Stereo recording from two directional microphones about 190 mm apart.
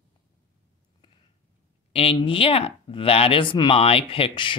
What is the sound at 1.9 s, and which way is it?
Speech, 30° left (ahead or behind).